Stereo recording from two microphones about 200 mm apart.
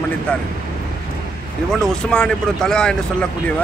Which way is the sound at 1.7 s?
5° left (ahead or behind).